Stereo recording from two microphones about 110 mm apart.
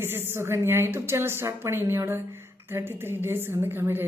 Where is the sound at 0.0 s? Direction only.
20° right (ahead or behind).